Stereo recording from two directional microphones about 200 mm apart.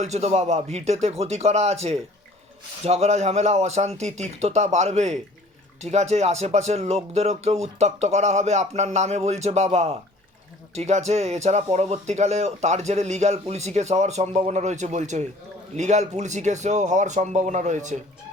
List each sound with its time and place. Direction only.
0.0 s speech: 35° right (ahead or behind)